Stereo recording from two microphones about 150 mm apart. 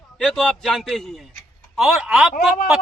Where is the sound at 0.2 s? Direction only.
5° left (ahead or behind).